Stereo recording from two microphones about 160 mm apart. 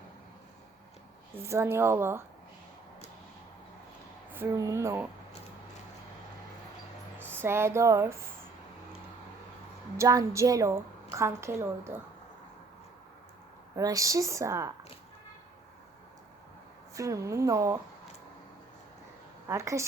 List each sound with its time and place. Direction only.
1.4 s a woman's voice: 15° right (ahead or behind)
4.3 s speech: 15° right (ahead or behind)
7.4 s a woman's voice: 15° right (ahead or behind)
10.0 s a woman's voice: 20° right (ahead or behind)
13.7 s a woman's voice: 20° right (ahead or behind)
16.9 s a woman's voice: 20° right (ahead or behind)
19.5 s a woman's voice: 20° right (ahead or behind)